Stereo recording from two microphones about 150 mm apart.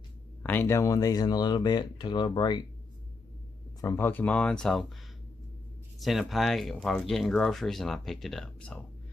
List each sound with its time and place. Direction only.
0.4 s speech: 15° left (ahead or behind); by 2.6 s 30° left (ahead or behind)
3.8 s speech: 15° left (ahead or behind)
5.9 s speech: centre (ahead or behind)